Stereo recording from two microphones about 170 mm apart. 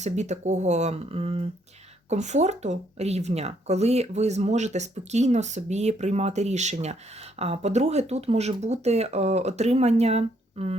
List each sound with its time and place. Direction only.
0.0 s speech: 40° right (ahead or behind)